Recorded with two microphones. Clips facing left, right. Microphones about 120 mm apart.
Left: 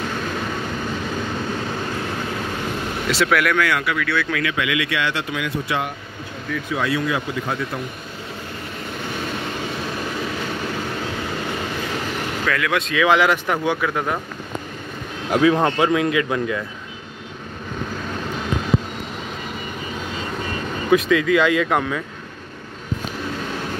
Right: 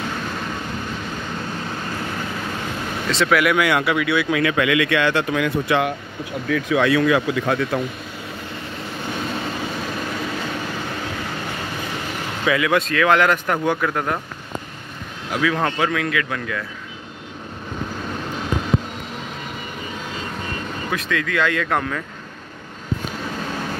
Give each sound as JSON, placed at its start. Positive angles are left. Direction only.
{"t": 3.1, "sound": "speech", "side_deg": 0}
{"t": 3.5, "sound": "speech", "side_deg": -20}
{"t": 4.4, "sound": "a man's voice", "side_deg": -40}
{"t": 6.5, "sound": "speech", "side_deg": -85}
{"t": 12.4, "sound": "speech", "side_deg": -5}
{"t": 15.3, "sound": "speech", "side_deg": 25}
{"t": 20.9, "sound": "speech", "side_deg": 10}